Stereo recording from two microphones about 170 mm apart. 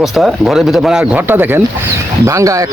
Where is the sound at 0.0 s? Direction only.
Centre (ahead or behind).